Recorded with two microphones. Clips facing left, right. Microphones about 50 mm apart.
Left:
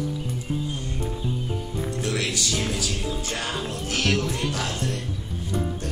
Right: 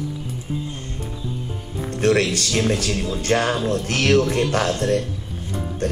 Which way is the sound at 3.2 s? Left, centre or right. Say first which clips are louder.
Right 10 dB; right.